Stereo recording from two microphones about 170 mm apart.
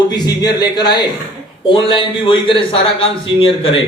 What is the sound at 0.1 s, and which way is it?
A man's voice, 25° left (ahead or behind).